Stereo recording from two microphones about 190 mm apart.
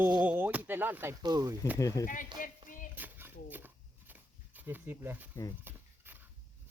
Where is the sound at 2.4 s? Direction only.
45° left (ahead or behind).